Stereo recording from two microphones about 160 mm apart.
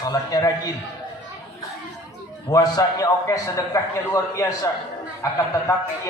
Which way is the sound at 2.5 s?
20° left (ahead or behind).